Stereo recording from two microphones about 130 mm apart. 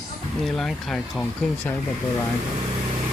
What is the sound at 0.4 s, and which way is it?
Speech, centre (ahead or behind).